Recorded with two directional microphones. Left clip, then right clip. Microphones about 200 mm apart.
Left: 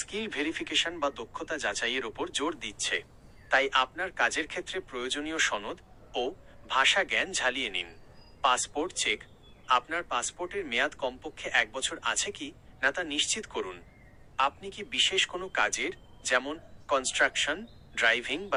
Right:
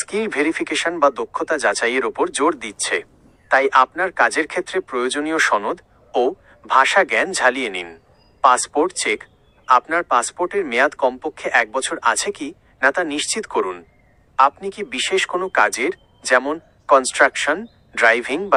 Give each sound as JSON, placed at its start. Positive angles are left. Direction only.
{"t": 0.0, "sound": "speech", "side_deg": -40}